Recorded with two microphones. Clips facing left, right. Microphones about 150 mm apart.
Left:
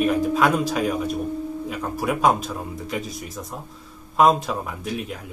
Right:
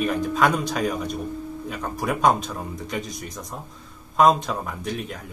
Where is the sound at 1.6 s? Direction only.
5° left (ahead or behind).